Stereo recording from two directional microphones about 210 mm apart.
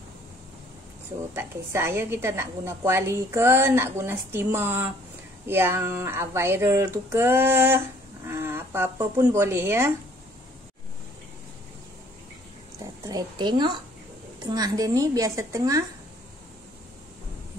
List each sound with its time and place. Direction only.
1.3 s a woman's voice: 10° right (ahead or behind)
12.7 s a woman's voice: 15° right (ahead or behind)